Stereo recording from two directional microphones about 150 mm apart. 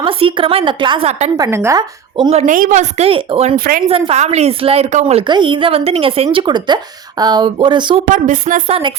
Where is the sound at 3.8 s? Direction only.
40° right (ahead or behind).